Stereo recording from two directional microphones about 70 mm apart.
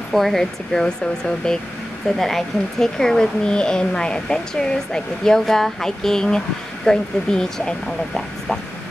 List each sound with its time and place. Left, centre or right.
0.1 s speech: centre
2.0 s speech: centre